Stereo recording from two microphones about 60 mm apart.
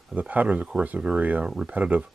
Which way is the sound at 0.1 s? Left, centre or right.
Right.